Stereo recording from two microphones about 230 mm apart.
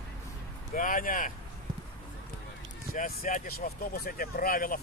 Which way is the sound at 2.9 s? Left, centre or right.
Left.